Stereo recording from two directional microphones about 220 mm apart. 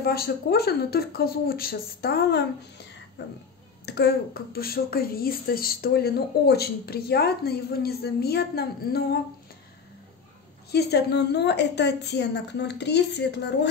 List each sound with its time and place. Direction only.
0.0 s speech: 45° left (ahead or behind)
10.7 s speech: 50° left (ahead or behind)